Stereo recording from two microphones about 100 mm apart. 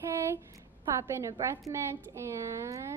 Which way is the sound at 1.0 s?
30° right (ahead or behind).